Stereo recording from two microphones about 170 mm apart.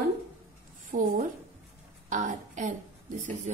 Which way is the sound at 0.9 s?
55° right (ahead or behind).